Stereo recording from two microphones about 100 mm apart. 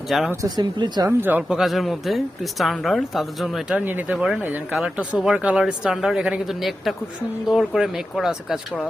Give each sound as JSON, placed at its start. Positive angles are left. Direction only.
{"t": 0.1, "sound": "a woman's voice", "side_deg": 0}
{"t": 0.4, "sound": "speech", "side_deg": -45}
{"t": 1.2, "sound": "speech", "side_deg": -15}
{"t": 1.5, "sound": "a woman's voice", "side_deg": -5}
{"t": 3.8, "sound": "speech", "side_deg": -20}
{"t": 4.1, "sound": "a woman's voice", "side_deg": -10}